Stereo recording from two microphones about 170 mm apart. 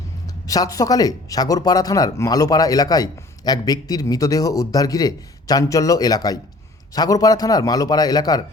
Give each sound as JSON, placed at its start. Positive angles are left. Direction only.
{"t": 0.4, "sound": "speech", "side_deg": 20}